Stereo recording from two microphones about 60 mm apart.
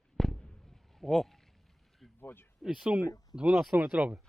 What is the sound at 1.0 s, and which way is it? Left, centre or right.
Speech, centre.